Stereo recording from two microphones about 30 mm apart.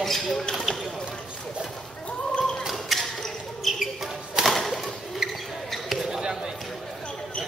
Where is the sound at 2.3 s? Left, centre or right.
Left.